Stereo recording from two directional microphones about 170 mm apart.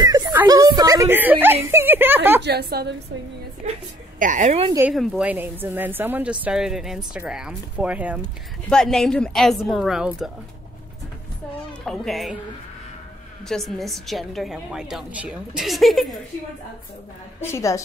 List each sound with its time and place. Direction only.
0.0 s a sound: 20° right (ahead or behind)
2.4 s a woman's voice: 65° right (ahead or behind)
4.2 s a woman's voice: 45° right (ahead or behind)
4.9 s speech: centre (ahead or behind)
8.6 s a woman's voice: 5° left (ahead or behind)
11.8 s a woman's voice: 5° left (ahead or behind)
13.5 s a woman's voice: centre (ahead or behind)
17.5 s a woman's voice: 15° left (ahead or behind)